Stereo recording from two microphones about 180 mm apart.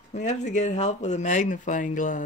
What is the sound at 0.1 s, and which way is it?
Speech, 40° left (ahead or behind).